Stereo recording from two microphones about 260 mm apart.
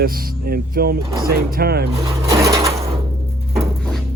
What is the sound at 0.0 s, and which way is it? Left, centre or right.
Speech, right.